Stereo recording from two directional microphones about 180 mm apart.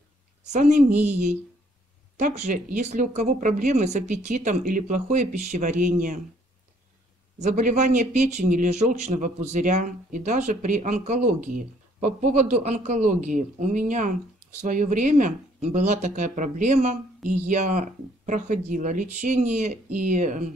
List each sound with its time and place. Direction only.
0.5 s speech: 45° right (ahead or behind)
2.1 s speech: 40° right (ahead or behind)
7.3 s speech: 40° right (ahead or behind)